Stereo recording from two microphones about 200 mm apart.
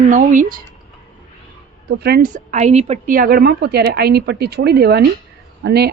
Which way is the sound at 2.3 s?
35° right (ahead or behind).